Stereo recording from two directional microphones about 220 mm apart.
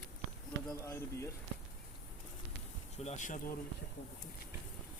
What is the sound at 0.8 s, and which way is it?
Speech, 10° left (ahead or behind).